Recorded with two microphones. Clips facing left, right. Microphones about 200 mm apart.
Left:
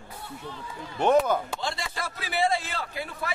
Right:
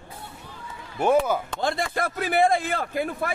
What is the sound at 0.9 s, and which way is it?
Speech, 10° right (ahead or behind).